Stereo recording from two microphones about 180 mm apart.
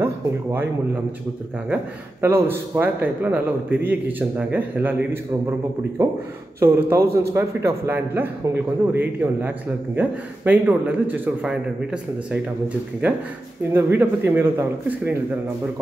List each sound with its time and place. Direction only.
0.0 s speech: 10° right (ahead or behind)
2.2 s a man's voice: 15° right (ahead or behind)